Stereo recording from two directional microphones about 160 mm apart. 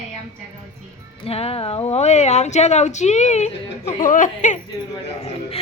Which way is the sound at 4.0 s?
55° left (ahead or behind).